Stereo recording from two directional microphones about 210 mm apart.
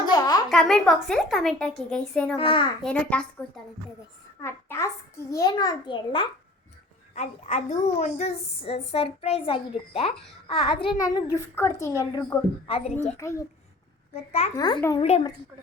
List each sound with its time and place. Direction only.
0.0 s a sound: 20° left (ahead or behind)
0.5 s a woman's voice: centre (ahead or behind)
2.3 s a child's voice: 25° left (ahead or behind)
2.8 s a woman's voice: 5° left (ahead or behind); by 6.2 s 25° left (ahead or behind)
7.1 s a woman's voice: 35° left (ahead or behind); by 12.2 s 15° left (ahead or behind)
12.6 s a woman's voice: 30° left (ahead or behind)
13.1 s a child's voice: 15° left (ahead or behind)
14.2 s a woman's voice: 30° left (ahead or behind); by 15.0 s 15° left (ahead or behind)
15.0 s a woman's voice: 30° left (ahead or behind)